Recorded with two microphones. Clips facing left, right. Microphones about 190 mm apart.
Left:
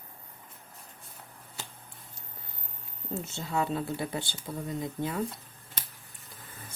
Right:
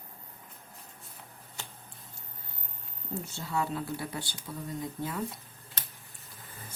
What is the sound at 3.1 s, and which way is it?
Speech, 25° left (ahead or behind).